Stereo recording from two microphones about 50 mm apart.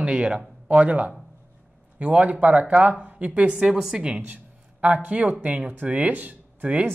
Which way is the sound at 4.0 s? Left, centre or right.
Right.